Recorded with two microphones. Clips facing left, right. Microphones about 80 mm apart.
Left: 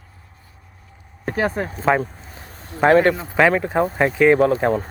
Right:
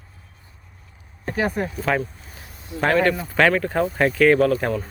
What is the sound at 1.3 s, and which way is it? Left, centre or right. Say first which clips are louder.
Speech: left 2 dB; left.